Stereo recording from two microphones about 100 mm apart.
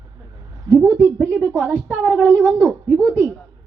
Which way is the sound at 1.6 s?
15° right (ahead or behind).